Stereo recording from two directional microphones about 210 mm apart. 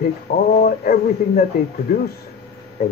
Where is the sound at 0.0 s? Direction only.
45° left (ahead or behind).